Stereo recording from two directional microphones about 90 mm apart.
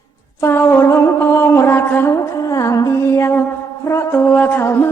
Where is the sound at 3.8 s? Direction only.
30° left (ahead or behind).